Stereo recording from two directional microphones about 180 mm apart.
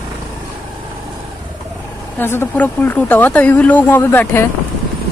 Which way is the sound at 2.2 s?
10° left (ahead or behind).